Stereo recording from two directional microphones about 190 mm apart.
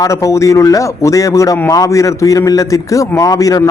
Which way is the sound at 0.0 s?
15° left (ahead or behind).